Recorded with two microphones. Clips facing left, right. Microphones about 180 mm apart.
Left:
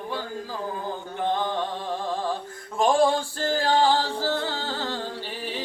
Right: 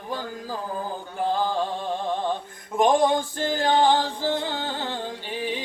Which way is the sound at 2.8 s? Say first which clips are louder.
Right 1 dB; 20° right (ahead or behind).